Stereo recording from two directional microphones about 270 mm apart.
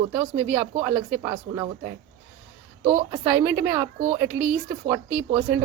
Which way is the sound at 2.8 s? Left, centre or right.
Right.